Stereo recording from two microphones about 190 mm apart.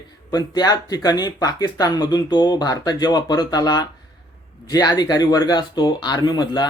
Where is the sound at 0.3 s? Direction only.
20° left (ahead or behind).